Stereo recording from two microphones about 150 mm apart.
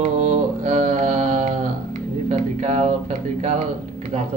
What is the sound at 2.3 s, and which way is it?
Speech, 50° right (ahead or behind).